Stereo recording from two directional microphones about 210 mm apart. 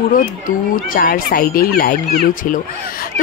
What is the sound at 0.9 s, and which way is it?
Speech, 45° left (ahead or behind).